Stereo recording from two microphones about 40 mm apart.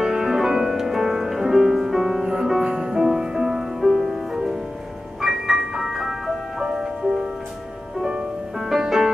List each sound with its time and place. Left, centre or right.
0.0 s music: centre
8.5 s music: centre